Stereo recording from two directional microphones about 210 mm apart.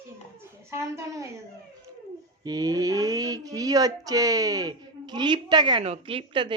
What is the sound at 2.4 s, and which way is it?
Speech, 15° right (ahead or behind).